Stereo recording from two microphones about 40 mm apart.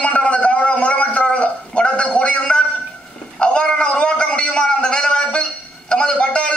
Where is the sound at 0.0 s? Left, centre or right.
Left.